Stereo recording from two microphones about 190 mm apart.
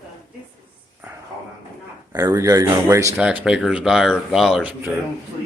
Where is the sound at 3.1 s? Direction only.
5° right (ahead or behind).